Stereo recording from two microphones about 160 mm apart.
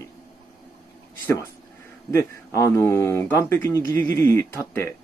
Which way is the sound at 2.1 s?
20° left (ahead or behind).